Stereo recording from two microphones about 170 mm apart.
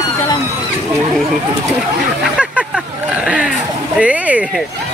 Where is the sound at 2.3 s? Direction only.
5° right (ahead or behind).